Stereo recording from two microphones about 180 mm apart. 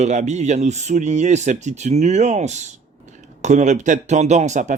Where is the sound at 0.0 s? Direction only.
40° right (ahead or behind).